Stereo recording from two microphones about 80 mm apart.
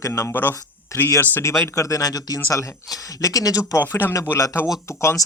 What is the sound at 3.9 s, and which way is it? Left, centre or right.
Speech, left.